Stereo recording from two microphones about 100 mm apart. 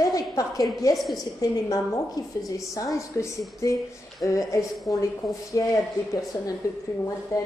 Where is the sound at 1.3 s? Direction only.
40° left (ahead or behind).